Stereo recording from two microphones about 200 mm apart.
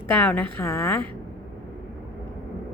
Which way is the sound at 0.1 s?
10° left (ahead or behind).